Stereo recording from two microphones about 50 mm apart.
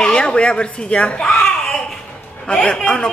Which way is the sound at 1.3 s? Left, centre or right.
Centre.